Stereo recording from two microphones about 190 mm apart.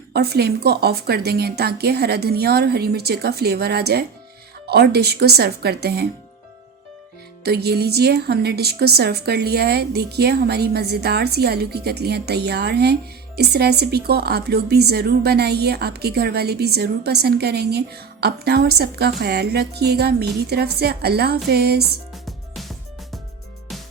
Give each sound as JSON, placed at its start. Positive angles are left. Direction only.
{"t": 0.1, "sound": "a woman's voice", "side_deg": -55}
{"t": 7.4, "sound": "a woman's voice", "side_deg": -55}
{"t": 22.1, "sound": "music", "side_deg": 0}